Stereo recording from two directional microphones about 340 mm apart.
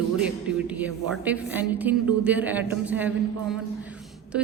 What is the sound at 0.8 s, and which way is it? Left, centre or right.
Speech, centre.